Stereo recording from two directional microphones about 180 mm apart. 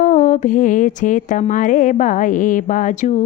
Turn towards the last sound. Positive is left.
turn(degrees=45)  # may be behind; listen again after turning